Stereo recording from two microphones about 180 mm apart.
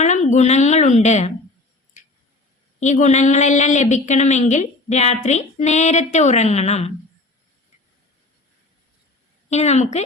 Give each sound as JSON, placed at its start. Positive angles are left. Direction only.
{"t": 0.0, "sound": "a woman's voice", "side_deg": 40}
{"t": 2.0, "sound": "a sound", "side_deg": 40}
{"t": 2.8, "sound": "a woman's voice", "side_deg": 40}
{"t": 9.5, "sound": "a woman's voice", "side_deg": 40}